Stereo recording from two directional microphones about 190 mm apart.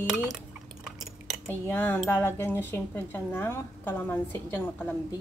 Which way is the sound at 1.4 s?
10° left (ahead or behind).